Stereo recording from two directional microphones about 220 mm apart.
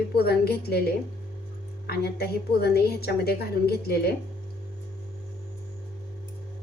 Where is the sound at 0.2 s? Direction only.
45° left (ahead or behind).